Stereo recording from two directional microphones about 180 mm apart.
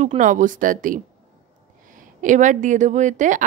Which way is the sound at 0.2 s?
45° right (ahead or behind).